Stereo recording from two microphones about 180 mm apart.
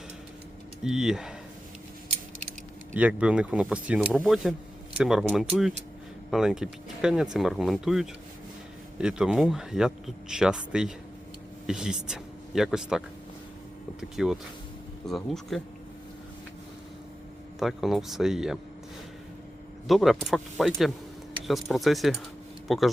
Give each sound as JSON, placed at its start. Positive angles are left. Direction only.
{"t": 0.9, "sound": "speech", "side_deg": -5}
{"t": 2.9, "sound": "speech", "side_deg": -5}
{"t": 14.0, "sound": "speech", "side_deg": 0}
{"t": 17.6, "sound": "speech", "side_deg": 0}
{"t": 19.9, "sound": "speech", "side_deg": 0}